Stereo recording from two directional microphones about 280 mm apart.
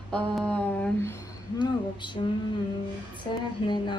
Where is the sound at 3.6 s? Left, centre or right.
Centre.